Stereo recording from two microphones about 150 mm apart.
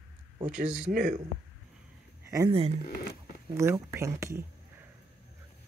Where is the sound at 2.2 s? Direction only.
20° right (ahead or behind).